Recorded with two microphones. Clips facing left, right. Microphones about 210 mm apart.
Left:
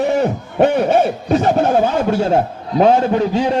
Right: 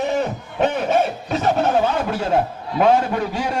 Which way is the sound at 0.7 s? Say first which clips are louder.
Left 5 dB; 40° left (ahead or behind).